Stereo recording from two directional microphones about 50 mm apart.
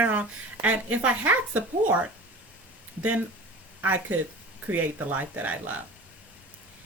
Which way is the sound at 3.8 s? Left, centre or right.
Right.